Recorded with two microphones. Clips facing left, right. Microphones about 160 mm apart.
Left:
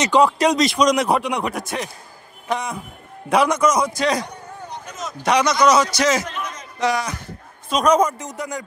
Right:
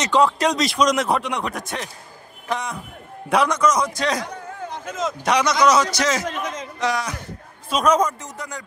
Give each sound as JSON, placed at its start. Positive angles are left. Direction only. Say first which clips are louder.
{"t": 0.0, "sound": "speech", "louder": "left 2 dB", "side_deg": 0}
{"t": 4.6, "sound": "a sound", "louder": "right 5 dB", "side_deg": -90}
{"t": 5.2, "sound": "speech", "louder": "left 2 dB", "side_deg": 0}
{"t": 8.2, "sound": "speech", "louder": "left 5 dB", "side_deg": 15}